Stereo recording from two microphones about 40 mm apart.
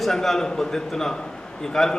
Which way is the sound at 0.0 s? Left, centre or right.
Centre.